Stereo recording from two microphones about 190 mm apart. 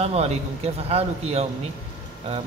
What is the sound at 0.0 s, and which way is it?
A man's voice, 35° right (ahead or behind).